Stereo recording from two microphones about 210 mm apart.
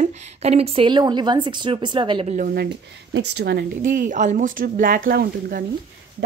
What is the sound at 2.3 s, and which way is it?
Speech, 45° right (ahead or behind).